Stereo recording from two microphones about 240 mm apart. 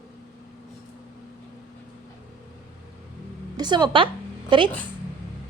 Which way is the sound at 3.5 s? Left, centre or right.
Centre.